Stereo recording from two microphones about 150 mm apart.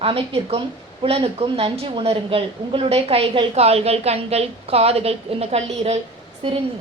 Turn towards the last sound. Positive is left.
turn(degrees=-35)  # may be behind; listen again after turning